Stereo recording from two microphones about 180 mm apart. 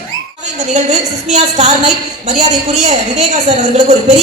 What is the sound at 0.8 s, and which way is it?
A woman's voice, 40° right (ahead or behind).